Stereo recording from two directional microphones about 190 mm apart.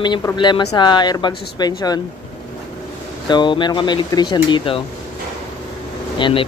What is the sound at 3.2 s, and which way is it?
Speech, 25° left (ahead or behind).